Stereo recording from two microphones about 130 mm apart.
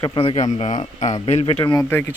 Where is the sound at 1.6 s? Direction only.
30° left (ahead or behind).